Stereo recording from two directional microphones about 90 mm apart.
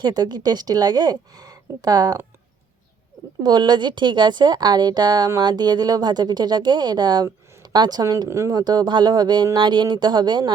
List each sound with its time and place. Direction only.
0.0 s speech: 50° right (ahead or behind)
3.4 s speech: 55° right (ahead or behind)
8.3 s speech: 35° right (ahead or behind)
8.5 s speech: 50° right (ahead or behind)